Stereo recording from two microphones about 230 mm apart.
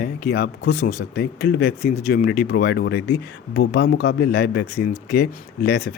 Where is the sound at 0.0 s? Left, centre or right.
Left.